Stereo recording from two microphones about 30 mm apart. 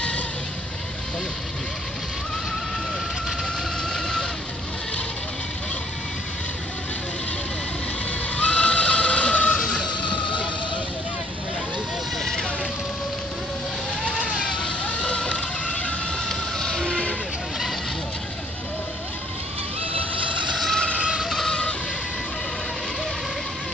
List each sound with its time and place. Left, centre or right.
3.9 s vehicle: left
8.4 s neigh: left
9.3 s vehicle: left
12.2 s vehicle: centre
14.7 s vehicle: left
16.3 s a sound: left
21.5 s fowl: left